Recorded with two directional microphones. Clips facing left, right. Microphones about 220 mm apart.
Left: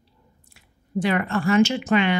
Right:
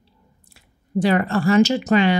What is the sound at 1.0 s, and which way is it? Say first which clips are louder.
Speech: right 4 dB; 35° right (ahead or behind).